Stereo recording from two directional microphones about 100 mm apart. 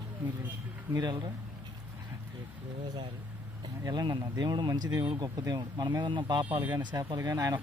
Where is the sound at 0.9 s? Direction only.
40° right (ahead or behind).